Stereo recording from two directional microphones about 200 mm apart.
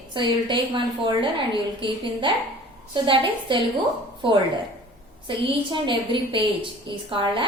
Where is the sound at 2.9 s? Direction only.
25° right (ahead or behind).